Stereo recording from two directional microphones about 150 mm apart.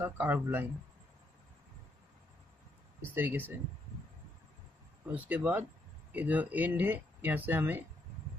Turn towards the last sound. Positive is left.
turn(degrees=-15)  # may be behind; listen again after turning